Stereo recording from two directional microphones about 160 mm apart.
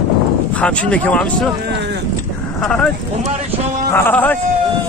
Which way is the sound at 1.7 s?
90° right.